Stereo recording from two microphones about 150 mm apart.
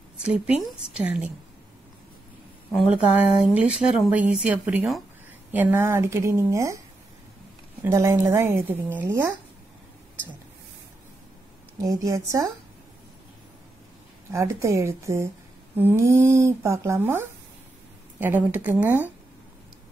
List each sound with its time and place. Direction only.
0.2 s speech: 5° right (ahead or behind)
2.7 s a woman's voice: centre (ahead or behind); by 6.8 s 20° right (ahead or behind)
7.8 s speech: 20° right (ahead or behind)
11.8 s a woman's voice: 20° right (ahead or behind)
14.3 s a woman's voice: 20° right (ahead or behind)